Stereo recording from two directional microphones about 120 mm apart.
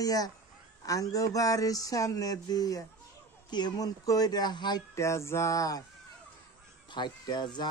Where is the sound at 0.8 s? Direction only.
30° left (ahead or behind).